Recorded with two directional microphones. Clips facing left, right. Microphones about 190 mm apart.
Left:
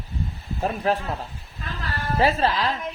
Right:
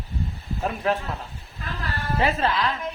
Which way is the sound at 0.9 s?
35° left (ahead or behind).